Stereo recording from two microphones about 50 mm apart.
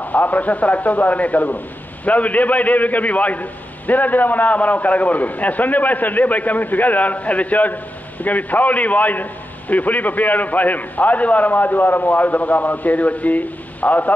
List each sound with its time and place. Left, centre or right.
0.0 s a man's voice: left